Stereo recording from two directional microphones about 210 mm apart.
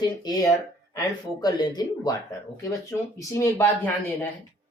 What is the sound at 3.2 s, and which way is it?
Speech, 15° left (ahead or behind).